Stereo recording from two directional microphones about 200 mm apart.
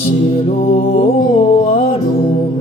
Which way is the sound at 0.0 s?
30° left (ahead or behind).